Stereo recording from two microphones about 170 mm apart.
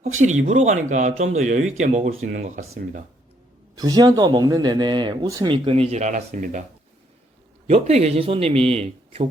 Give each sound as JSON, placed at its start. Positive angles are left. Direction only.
{"t": 0.0, "sound": "speech", "side_deg": -45}
{"t": 3.8, "sound": "speech", "side_deg": -20}
{"t": 7.7, "sound": "a man's voice", "side_deg": -40}